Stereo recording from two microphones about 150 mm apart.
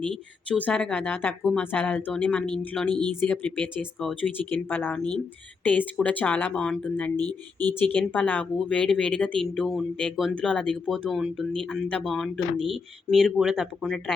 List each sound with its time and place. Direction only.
0.4 s speech: 10° left (ahead or behind)
7.2 s speech: 25° right (ahead or behind)
7.9 s speech: 10° left (ahead or behind)